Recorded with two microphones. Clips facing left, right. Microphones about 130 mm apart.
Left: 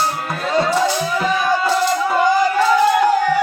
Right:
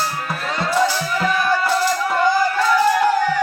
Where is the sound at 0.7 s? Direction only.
20° left (ahead or behind).